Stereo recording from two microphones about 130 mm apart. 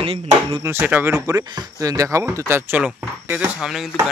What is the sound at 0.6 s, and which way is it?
Speech, 15° right (ahead or behind).